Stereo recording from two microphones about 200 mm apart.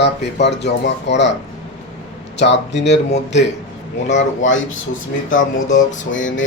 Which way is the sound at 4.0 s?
60° left (ahead or behind).